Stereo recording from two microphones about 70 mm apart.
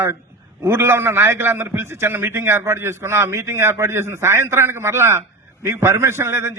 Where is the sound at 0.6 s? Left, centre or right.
Right.